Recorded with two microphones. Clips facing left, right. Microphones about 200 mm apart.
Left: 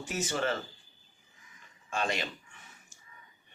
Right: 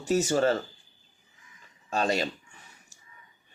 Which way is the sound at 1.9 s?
35° right (ahead or behind).